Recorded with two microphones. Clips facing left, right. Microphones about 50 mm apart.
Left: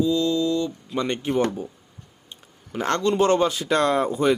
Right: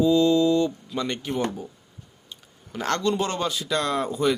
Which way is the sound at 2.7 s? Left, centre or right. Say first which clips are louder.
Left 3 dB; left.